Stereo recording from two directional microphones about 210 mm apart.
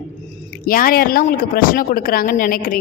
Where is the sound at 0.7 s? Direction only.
45° left (ahead or behind).